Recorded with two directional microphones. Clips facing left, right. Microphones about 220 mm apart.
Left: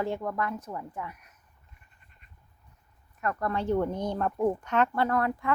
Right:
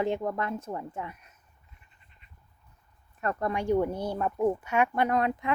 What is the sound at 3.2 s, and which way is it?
Speech, 30° right (ahead or behind).